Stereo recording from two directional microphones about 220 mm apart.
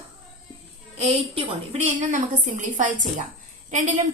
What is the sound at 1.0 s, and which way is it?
A woman's voice, 25° right (ahead or behind).